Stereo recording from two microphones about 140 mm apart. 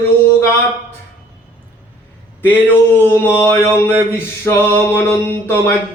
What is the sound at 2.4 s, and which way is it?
Music, 15° left (ahead or behind).